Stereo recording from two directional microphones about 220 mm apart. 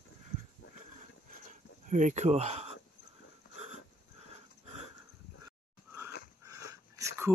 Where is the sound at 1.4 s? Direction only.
35° right (ahead or behind).